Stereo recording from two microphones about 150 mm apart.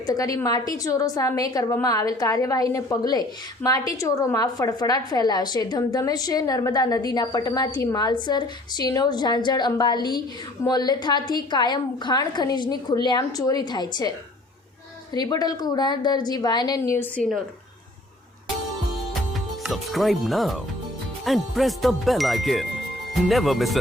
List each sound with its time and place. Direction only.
0.1 s a woman's voice: 25° left (ahead or behind)
15.1 s a woman's voice: 25° left (ahead or behind)
17.2 s speech: centre (ahead or behind)
19.6 s speech: centre (ahead or behind)